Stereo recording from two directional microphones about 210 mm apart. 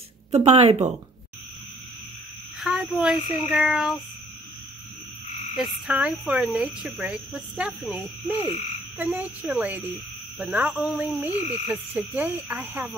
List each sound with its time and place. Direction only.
0.3 s speech: 30° right (ahead or behind)
2.6 s speech: 5° right (ahead or behind)
5.6 s speech: 5° right (ahead or behind)
8.9 s frog: 5° right (ahead or behind)